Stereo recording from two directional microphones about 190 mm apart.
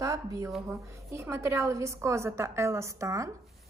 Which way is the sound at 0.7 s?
15° right (ahead or behind).